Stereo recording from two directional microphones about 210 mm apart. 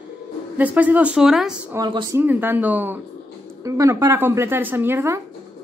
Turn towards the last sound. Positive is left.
turn(degrees=-10)  # may be behind; listen again after turning